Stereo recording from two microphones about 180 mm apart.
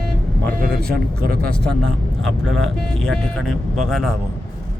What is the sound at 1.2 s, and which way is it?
Speech, 55° right (ahead or behind).